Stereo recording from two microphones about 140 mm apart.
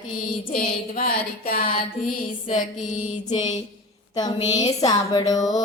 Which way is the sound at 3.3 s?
55° left (ahead or behind).